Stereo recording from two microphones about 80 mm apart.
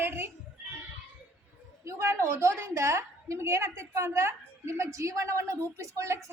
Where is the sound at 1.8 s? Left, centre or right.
Right.